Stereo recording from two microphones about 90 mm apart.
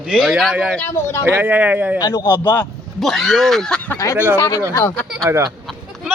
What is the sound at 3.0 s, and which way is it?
Speech, centre (ahead or behind).